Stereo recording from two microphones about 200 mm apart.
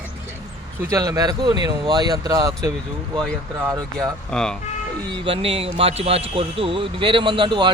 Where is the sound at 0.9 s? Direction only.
15° right (ahead or behind).